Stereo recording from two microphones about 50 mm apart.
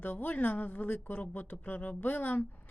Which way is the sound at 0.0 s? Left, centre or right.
Left.